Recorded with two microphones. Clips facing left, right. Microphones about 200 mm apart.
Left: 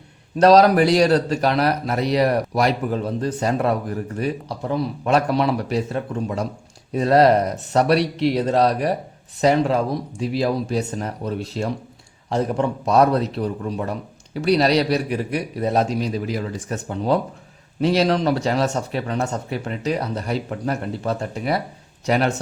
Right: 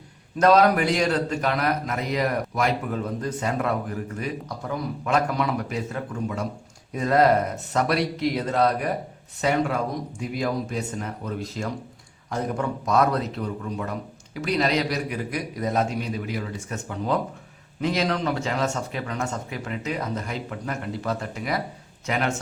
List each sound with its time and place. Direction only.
0.3 s speech: 35° left (ahead or behind)